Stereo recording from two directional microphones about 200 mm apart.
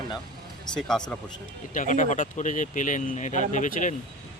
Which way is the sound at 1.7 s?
40° left (ahead or behind).